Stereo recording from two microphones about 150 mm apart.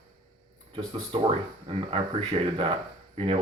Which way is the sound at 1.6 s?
40° right (ahead or behind).